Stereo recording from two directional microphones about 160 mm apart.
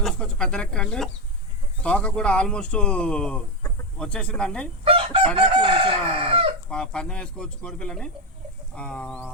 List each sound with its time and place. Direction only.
0.0 s speech: 5° left (ahead or behind)
4.9 s chicken: 35° right (ahead or behind)
6.7 s speech: 5° left (ahead or behind)